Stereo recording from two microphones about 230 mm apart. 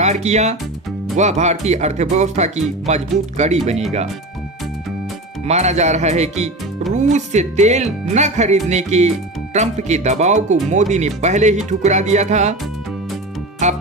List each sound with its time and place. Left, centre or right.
0.0 s speech: right
5.5 s speech: right
13.6 s speech: right